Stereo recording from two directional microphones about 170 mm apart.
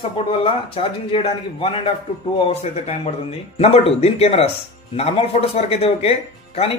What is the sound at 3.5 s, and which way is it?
A man's voice, 35° left (ahead or behind).